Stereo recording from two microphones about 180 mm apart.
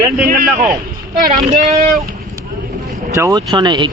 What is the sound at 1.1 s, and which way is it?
Speech, 50° right (ahead or behind).